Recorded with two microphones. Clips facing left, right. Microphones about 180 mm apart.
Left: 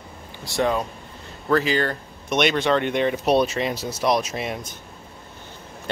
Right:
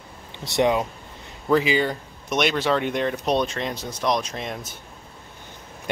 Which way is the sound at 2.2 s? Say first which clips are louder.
Left 2 dB; centre (ahead or behind).